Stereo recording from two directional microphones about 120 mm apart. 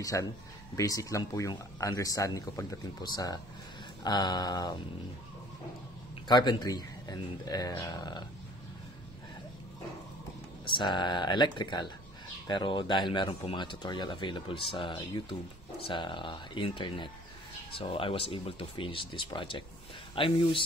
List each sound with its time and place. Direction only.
0.0 s speech: 30° left (ahead or behind)
6.2 s speech: 35° left (ahead or behind)
10.7 s speech: 40° left (ahead or behind)